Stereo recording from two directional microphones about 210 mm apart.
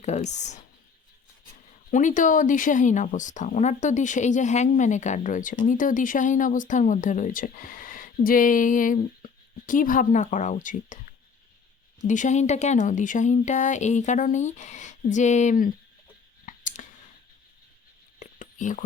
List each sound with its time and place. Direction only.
0.0 s speech: 35° left (ahead or behind)
1.9 s speech: 35° left (ahead or behind)
12.0 s speech: 35° left (ahead or behind)
16.5 s clicking: 35° left (ahead or behind)
18.2 s whispering: 35° left (ahead or behind)